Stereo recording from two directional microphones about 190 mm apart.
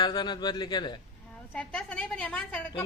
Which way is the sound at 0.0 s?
25° left (ahead or behind).